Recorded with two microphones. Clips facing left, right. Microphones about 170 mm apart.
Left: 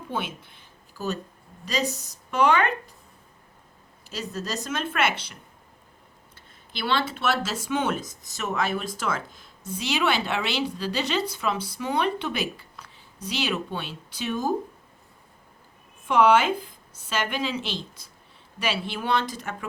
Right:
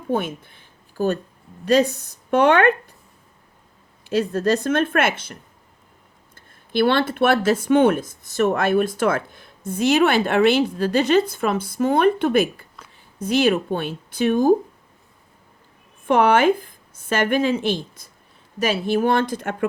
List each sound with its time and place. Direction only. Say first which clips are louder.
0.1 s a woman's voice: right 9 dB; 50° right (ahead or behind)
4.1 s a woman's voice: right 13 dB; 55° right (ahead or behind)
16.0 s speech: right 4 dB; 55° right (ahead or behind)